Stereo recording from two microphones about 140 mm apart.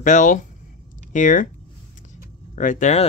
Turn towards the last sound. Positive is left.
turn(degrees=60)  # may be behind; listen again after turning